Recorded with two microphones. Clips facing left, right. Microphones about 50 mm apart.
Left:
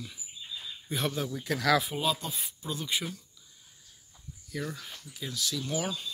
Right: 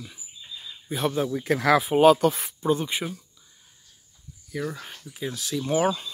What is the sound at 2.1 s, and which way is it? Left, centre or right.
Speech, right.